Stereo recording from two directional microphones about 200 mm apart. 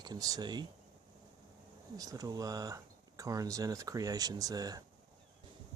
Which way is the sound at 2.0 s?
15° right (ahead or behind).